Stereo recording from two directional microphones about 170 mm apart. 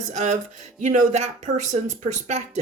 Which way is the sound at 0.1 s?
45° right (ahead or behind).